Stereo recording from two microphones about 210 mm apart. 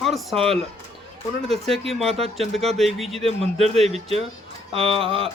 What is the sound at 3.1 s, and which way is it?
Speech, 30° right (ahead or behind).